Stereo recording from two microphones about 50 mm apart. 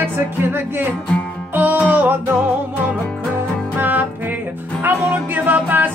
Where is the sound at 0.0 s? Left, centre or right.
Right.